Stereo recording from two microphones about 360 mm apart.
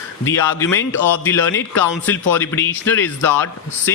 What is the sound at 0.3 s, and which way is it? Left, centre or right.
Speech, centre.